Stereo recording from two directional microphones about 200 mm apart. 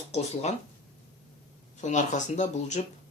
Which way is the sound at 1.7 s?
35° left (ahead or behind).